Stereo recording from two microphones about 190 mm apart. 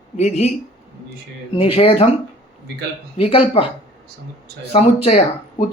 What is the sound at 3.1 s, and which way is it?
Speech, 30° left (ahead or behind).